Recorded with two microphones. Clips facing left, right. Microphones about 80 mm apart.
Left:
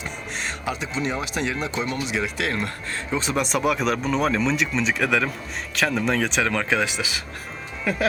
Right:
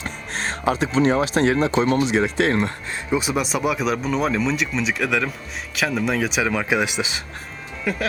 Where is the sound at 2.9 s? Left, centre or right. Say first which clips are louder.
Right 3 dB; centre.